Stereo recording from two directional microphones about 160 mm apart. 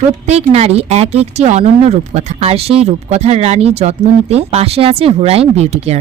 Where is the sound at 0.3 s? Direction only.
40° right (ahead or behind).